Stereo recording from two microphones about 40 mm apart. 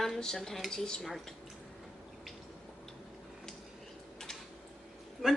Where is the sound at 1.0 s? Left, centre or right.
Centre.